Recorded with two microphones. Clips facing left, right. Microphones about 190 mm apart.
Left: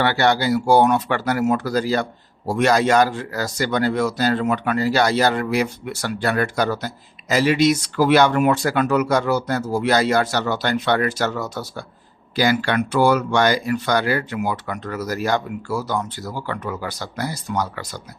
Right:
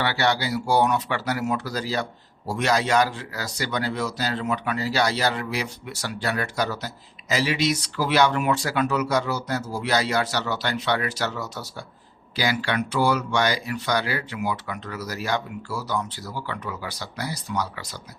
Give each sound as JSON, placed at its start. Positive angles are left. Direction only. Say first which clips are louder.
{"t": 0.0, "sound": "speech", "louder": "left 5 dB", "side_deg": 50}